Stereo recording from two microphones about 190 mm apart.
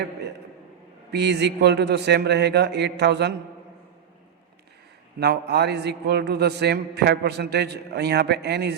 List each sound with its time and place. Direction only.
1.1 s a man's voice: 65° right (ahead or behind)
5.2 s a man's voice: 60° right (ahead or behind)